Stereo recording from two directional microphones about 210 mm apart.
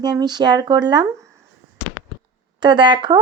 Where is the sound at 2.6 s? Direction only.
20° right (ahead or behind).